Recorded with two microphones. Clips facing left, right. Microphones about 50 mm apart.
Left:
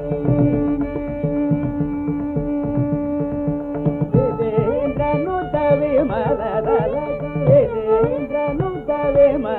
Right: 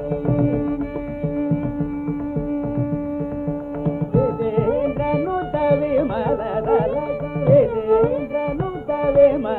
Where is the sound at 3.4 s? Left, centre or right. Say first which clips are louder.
Left 3 dB; centre.